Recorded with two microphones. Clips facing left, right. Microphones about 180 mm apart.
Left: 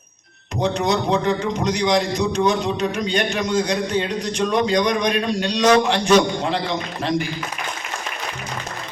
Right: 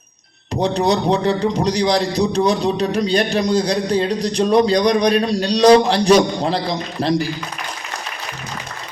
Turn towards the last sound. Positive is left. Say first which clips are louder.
# right 4 dB
turn(degrees=-35)  # may be behind; listen again after turning